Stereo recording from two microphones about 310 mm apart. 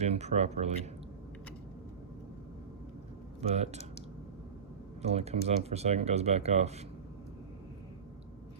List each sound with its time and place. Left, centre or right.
0.0 s speech: right
3.4 s speech: right
5.0 s speech: centre